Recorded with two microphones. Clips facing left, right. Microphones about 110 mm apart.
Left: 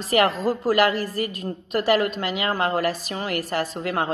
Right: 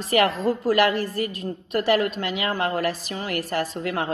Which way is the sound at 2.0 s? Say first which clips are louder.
Left 1 dB; 35° left (ahead or behind).